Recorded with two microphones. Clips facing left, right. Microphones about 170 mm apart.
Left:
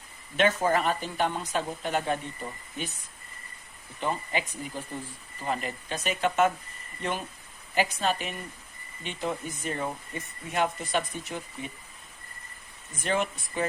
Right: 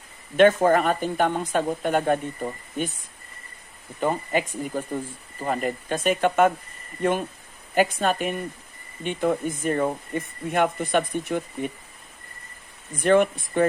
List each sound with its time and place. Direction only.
0.3 s speech: 50° right (ahead or behind)
4.0 s speech: 45° right (ahead or behind)
12.9 s speech: 55° right (ahead or behind)